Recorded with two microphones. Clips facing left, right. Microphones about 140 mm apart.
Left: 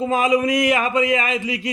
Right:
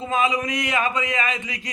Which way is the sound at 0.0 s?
40° left (ahead or behind).